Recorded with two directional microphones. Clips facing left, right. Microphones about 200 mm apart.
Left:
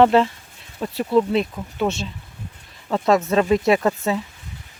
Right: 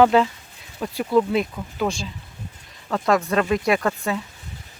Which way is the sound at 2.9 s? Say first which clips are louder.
Left 2 dB; 25° left (ahead or behind).